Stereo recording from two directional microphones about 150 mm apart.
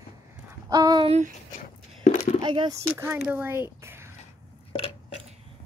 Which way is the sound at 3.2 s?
15° right (ahead or behind).